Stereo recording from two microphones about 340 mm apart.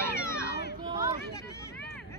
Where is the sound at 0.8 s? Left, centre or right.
Centre.